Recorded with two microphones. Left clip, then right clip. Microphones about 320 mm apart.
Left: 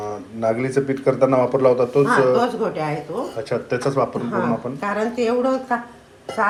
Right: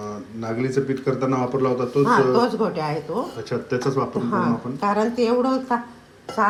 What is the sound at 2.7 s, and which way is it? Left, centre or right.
Speech, right.